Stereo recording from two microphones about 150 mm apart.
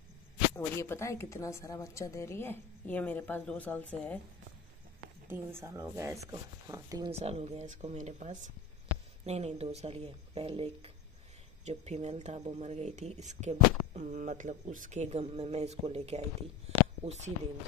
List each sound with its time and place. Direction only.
0.6 s a woman's voice: 15° left (ahead or behind)
5.3 s speech: 15° right (ahead or behind)
7.1 s speech: 40° right (ahead or behind)